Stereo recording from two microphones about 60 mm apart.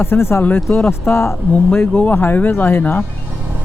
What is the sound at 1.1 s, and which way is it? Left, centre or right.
Speech, left.